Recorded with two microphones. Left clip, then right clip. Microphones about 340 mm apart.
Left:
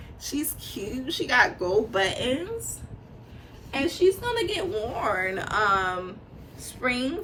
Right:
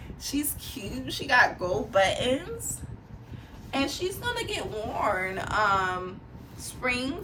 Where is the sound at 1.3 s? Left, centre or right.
Right.